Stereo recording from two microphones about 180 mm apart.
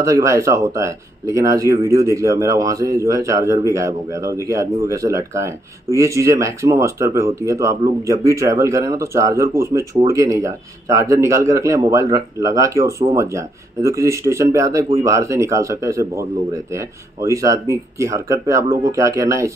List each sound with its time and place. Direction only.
0.0 s speech: 15° right (ahead or behind)